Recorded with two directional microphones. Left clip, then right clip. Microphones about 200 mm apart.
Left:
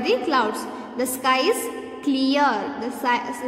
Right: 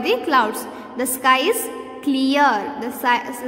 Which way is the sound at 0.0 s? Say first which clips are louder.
Right 3 dB; 20° right (ahead or behind).